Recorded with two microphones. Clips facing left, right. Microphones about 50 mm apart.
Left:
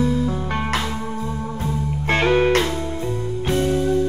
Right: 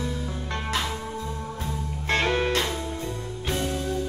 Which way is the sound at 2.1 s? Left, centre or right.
Centre.